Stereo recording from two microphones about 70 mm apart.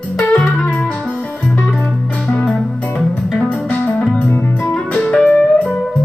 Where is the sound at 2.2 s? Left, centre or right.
Centre.